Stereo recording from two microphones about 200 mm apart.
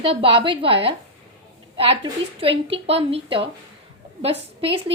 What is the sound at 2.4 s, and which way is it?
A woman's voice, 25° right (ahead or behind).